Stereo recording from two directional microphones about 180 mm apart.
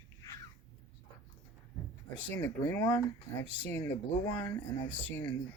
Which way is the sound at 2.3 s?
10° left (ahead or behind).